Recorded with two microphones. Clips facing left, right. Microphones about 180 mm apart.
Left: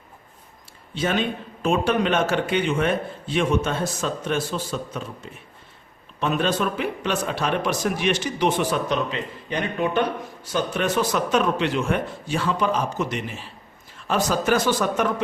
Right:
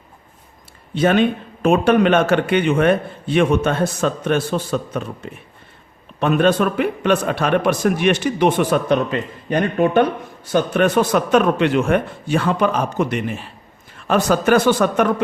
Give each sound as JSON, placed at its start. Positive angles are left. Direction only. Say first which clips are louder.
{"t": 0.9, "sound": "a man's voice", "louder": "right 8 dB", "side_deg": -60}